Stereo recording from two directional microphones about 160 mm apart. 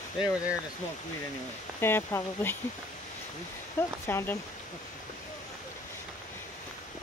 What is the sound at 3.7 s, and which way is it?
Speech, 15° left (ahead or behind).